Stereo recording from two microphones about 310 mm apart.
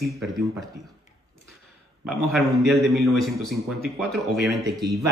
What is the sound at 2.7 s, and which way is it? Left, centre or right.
Speech, centre.